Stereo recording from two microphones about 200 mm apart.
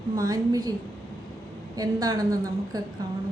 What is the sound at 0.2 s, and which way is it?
Speech, 20° right (ahead or behind).